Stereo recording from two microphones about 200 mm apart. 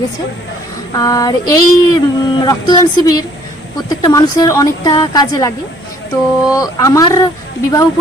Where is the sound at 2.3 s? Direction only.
20° left (ahead or behind).